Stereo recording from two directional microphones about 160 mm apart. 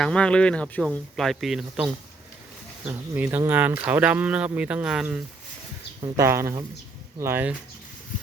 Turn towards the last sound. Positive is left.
turn(degrees=-15)  # may be behind; listen again after turning